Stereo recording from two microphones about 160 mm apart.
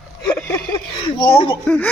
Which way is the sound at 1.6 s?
10° left (ahead or behind).